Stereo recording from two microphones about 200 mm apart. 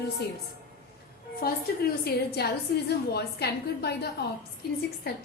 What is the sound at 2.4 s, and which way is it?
A woman's voice, 55° left (ahead or behind).